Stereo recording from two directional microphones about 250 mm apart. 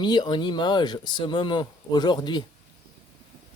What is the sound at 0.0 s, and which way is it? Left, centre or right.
Speech, centre.